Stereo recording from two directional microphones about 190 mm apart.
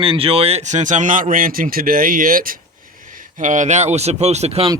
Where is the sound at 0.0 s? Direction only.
30° right (ahead or behind).